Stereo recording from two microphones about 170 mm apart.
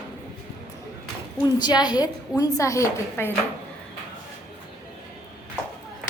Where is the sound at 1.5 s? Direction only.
25° left (ahead or behind).